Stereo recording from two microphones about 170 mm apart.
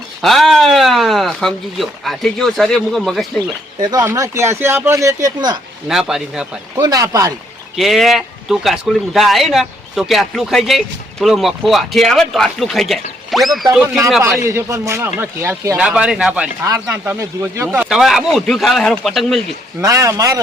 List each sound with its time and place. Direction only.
0.2 s speech: centre (ahead or behind)
3.8 s speech: 20° right (ahead or behind)
5.9 s speech: centre (ahead or behind)
6.7 s speech: 20° right (ahead or behind)
7.8 s speech: centre (ahead or behind)
14.2 s a man's voice: 15° right (ahead or behind); by 19.4 s centre (ahead or behind)
19.8 s speech: 20° right (ahead or behind)